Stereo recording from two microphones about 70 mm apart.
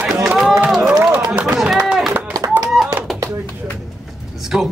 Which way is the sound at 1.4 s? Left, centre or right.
Centre.